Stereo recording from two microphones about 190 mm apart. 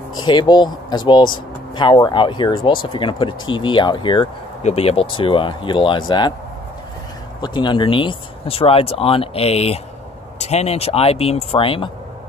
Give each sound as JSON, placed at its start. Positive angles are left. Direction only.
{"t": 0.2, "sound": "speech", "side_deg": 20}
{"t": 7.4, "sound": "speech", "side_deg": 25}